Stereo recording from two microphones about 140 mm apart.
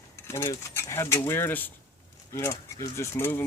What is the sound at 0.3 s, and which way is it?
Speech, 20° left (ahead or behind).